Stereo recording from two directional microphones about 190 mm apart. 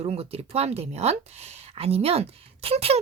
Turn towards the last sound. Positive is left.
turn(degrees=-30)  # may be behind; listen again after turning